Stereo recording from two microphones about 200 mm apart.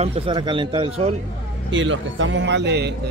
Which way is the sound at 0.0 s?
30° right (ahead or behind).